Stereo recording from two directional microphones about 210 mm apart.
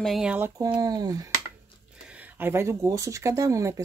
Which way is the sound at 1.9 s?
5° right (ahead or behind).